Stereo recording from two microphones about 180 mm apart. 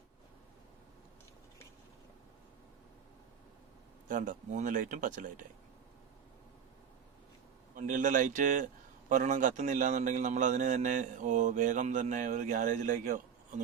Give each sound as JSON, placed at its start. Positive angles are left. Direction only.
{"t": 4.1, "sound": "a man's voice", "side_deg": -45}
{"t": 7.8, "sound": "a man's voice", "side_deg": -45}